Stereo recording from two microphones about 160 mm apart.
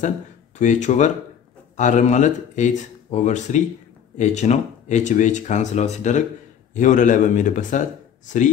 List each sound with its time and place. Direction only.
0.6 s speech: 50° left (ahead or behind)